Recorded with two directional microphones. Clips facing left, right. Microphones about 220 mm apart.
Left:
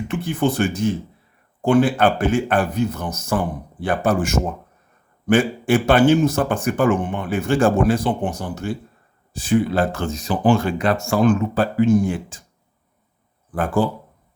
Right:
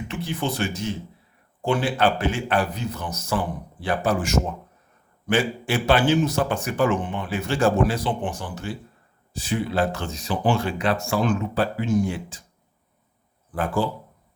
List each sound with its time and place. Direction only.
0.1 s speech: 55° left (ahead or behind)
13.8 s speech: 50° left (ahead or behind)